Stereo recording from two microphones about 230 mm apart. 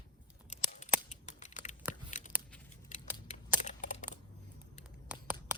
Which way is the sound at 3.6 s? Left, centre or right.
Left.